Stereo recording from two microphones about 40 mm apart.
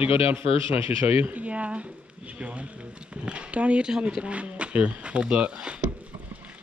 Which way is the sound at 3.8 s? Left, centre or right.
Centre.